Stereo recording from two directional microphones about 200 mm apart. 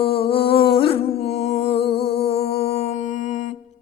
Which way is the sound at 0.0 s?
25° left (ahead or behind).